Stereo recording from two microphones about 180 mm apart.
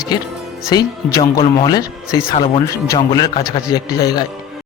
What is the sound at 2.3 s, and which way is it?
A man's voice, 35° left (ahead or behind).